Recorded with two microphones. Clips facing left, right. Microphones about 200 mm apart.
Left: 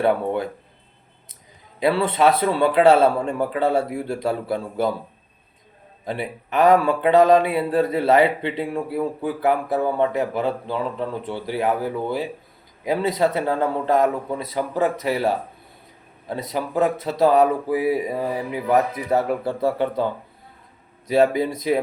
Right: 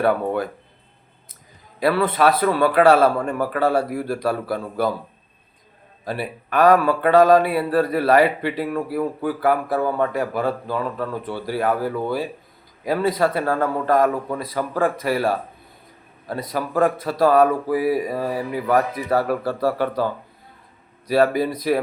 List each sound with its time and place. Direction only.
0.0 s speech: 25° left (ahead or behind)
1.8 s speech: 25° left (ahead or behind)
6.1 s speech: 20° left (ahead or behind)
21.1 s speech: 20° left (ahead or behind)